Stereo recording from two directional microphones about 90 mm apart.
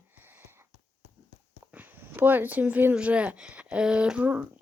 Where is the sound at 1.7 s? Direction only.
20° right (ahead or behind).